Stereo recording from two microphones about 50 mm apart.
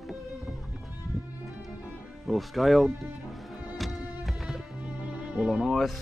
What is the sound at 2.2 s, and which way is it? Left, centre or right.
Speech, centre.